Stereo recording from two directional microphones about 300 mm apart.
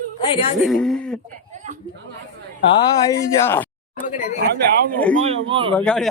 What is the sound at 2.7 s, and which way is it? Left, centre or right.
Speech, centre.